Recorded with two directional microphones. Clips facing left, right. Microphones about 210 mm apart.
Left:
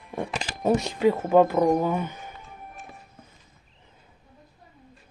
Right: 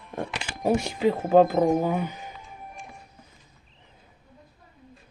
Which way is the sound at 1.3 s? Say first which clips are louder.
Right 2 dB; 35° right (ahead or behind).